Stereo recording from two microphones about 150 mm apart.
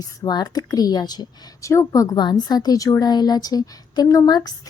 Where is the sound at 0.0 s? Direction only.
25° left (ahead or behind).